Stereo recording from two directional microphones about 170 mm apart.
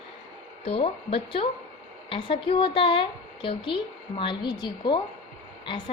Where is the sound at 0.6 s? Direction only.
35° left (ahead or behind).